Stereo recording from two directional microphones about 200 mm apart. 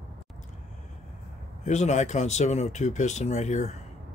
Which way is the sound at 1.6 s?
35° left (ahead or behind).